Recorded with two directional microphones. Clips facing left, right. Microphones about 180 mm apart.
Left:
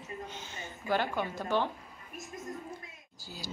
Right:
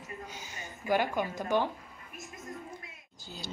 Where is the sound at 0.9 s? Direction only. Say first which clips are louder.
Right 2 dB; 10° right (ahead or behind).